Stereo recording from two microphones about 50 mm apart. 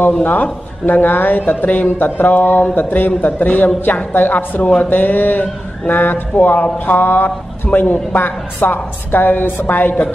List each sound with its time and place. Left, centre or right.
0.2 s speech: left